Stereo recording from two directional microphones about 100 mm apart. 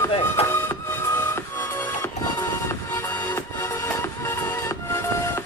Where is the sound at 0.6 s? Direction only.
25° left (ahead or behind).